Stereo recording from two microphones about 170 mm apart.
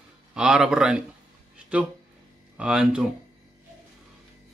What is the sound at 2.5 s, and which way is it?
Speech, 5° right (ahead or behind).